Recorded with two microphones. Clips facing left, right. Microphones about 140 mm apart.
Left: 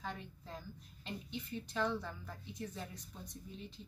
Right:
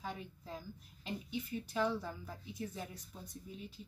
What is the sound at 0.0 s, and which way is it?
A woman's voice, 10° right (ahead or behind).